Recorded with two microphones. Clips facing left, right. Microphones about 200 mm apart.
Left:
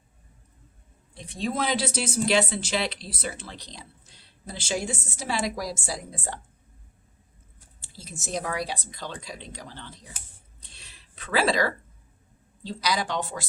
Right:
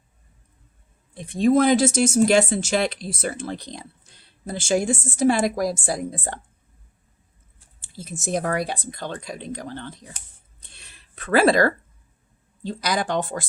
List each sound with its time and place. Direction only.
1.1 s speech: 55° right (ahead or behind)
7.8 s speech: 55° right (ahead or behind)
10.2 s speech: 5° left (ahead or behind)
10.6 s a sound: 55° right (ahead or behind)
12.6 s speech: 50° right (ahead or behind)